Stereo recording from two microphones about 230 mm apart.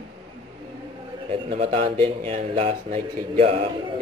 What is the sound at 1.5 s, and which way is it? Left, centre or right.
A man's voice, right.